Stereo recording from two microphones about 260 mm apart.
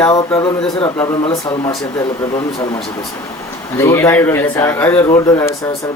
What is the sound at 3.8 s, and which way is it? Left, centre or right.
Speech, centre.